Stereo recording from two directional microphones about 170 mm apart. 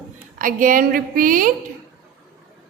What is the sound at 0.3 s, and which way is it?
A woman's voice, 50° right (ahead or behind).